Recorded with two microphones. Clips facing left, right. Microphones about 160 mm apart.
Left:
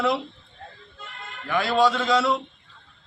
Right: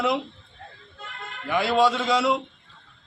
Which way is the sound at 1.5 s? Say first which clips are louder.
Even; 25° right (ahead or behind).